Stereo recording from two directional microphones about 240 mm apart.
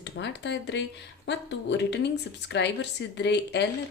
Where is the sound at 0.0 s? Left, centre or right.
Left.